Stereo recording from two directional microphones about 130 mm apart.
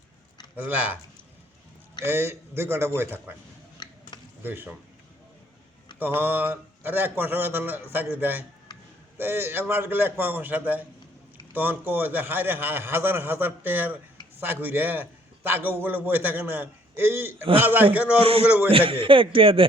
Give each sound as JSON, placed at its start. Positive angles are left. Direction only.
{"t": 0.5, "sound": "a man's voice", "side_deg": -15}
{"t": 2.0, "sound": "a man's voice", "side_deg": -15}
{"t": 4.1, "sound": "a sound", "side_deg": 35}
{"t": 4.4, "sound": "a man's voice", "side_deg": -15}
{"t": 6.0, "sound": "a man's voice", "side_deg": -15}
{"t": 18.2, "sound": "a man's voice", "side_deg": -45}
{"t": 18.4, "sound": "a man's voice", "side_deg": -15}
{"t": 18.7, "sound": "a man's voice", "side_deg": -45}